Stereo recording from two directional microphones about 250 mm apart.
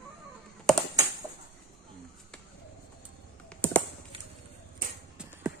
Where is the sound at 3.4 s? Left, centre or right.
Centre.